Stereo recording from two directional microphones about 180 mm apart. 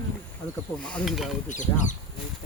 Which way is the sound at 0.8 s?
5° left (ahead or behind).